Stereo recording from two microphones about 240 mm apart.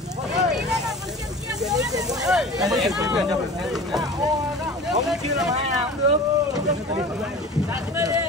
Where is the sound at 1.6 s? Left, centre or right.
Centre.